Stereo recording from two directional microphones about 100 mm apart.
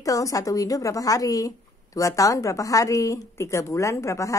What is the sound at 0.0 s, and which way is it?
Speech, 35° left (ahead or behind).